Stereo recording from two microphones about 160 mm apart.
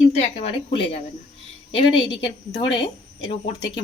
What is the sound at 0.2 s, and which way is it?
Speech, 40° left (ahead or behind).